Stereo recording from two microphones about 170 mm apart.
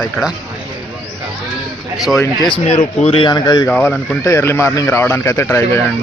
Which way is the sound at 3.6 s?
10° left (ahead or behind).